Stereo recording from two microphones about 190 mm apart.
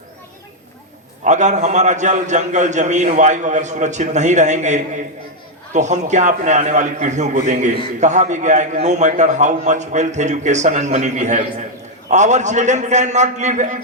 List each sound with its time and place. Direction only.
1.2 s a man's voice: 40° right (ahead or behind)